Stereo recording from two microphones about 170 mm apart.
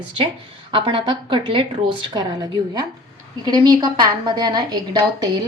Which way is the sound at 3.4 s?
25° right (ahead or behind).